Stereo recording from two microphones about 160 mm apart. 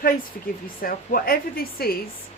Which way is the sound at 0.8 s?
65° left (ahead or behind).